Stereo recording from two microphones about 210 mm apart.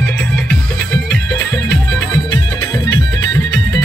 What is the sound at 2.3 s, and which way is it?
Music, 20° left (ahead or behind).